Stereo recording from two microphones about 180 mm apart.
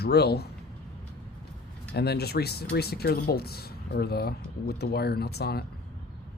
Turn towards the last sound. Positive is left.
turn(degrees=60)  # may be behind; listen again after turning